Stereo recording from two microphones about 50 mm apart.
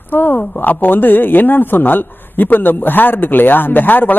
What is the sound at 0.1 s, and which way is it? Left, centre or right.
Speech, left.